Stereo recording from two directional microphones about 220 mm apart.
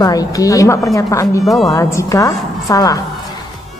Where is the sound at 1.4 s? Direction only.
Centre (ahead or behind).